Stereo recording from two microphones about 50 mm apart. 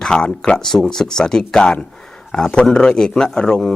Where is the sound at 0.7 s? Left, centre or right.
Centre.